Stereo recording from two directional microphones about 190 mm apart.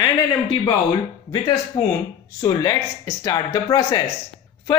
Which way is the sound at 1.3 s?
20° left (ahead or behind).